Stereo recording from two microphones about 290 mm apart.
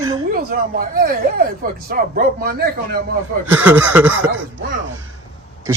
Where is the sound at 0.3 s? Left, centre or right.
Right.